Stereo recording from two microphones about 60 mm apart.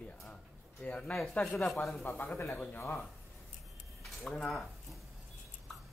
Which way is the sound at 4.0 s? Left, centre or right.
Centre.